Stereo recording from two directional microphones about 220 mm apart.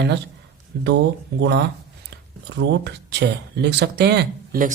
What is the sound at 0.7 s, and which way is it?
Speech, 50° right (ahead or behind).